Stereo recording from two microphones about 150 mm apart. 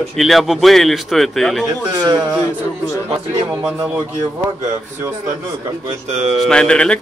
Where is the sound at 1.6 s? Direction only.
25° right (ahead or behind).